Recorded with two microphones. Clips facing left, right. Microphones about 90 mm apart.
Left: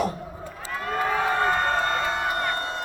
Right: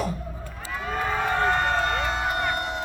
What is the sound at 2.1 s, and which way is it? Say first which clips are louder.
Crowd: even; 10° right (ahead or behind).